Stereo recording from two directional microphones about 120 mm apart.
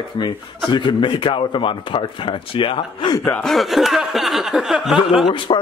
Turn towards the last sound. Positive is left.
turn(degrees=45)  # may be behind; listen again after turning